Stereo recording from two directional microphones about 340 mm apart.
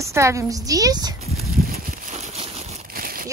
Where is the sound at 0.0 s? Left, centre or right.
Centre.